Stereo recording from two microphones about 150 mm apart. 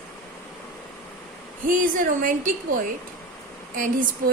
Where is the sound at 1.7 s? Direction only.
60° right (ahead or behind).